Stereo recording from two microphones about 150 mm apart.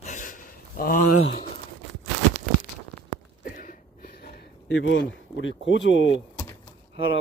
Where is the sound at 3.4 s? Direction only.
70° left (ahead or behind); by 4.5 s 90° left.